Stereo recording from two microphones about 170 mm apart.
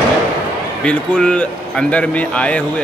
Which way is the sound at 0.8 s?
5° left (ahead or behind).